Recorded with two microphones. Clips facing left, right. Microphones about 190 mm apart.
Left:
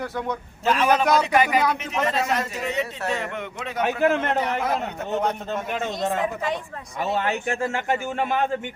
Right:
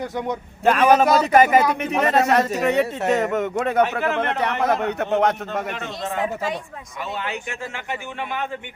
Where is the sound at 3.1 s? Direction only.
45° right (ahead or behind); by 5.9 s 75° right (ahead or behind).